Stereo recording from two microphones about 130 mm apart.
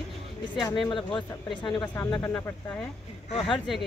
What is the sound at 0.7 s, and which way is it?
Speech, 40° left (ahead or behind).